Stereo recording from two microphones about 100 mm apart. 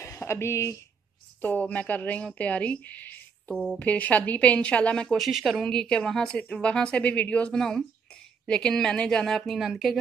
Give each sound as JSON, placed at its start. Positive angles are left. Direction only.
{"t": 0.0, "sound": "speech", "side_deg": 25}
{"t": 1.4, "sound": "a woman's voice", "side_deg": 15}